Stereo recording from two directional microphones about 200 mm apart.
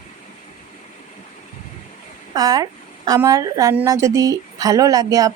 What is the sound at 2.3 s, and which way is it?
Speech, 20° right (ahead or behind).